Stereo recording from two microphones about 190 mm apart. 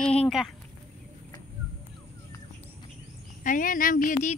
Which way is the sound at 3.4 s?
45° left (ahead or behind).